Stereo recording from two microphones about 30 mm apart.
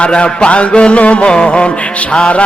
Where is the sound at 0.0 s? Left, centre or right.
Left.